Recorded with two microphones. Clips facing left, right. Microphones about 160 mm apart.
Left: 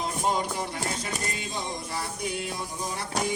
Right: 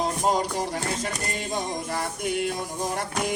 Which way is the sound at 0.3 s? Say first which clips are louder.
Right 2 dB; 35° right (ahead or behind).